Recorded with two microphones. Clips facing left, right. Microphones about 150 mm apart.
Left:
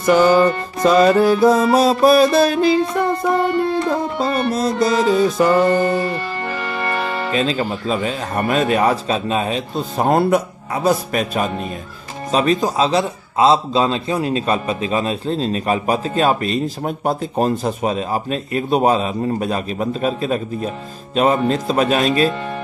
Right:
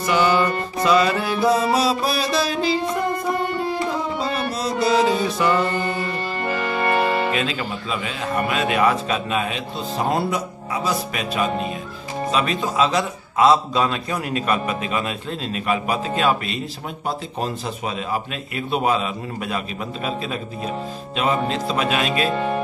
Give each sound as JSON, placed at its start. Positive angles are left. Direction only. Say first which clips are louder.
{"t": 0.0, "sound": "music", "louder": "left 6 dB", "side_deg": 45}
{"t": 6.8, "sound": "music", "louder": "right 4 dB", "side_deg": -25}
{"t": 7.3, "sound": "a man's voice", "louder": "left 5 dB", "side_deg": 35}